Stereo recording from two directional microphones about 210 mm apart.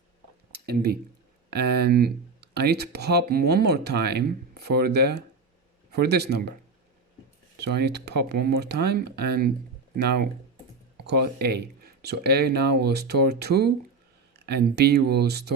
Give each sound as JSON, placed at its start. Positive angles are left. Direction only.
{"t": 0.5, "sound": "speech", "side_deg": -50}
{"t": 7.6, "sound": "speech", "side_deg": -50}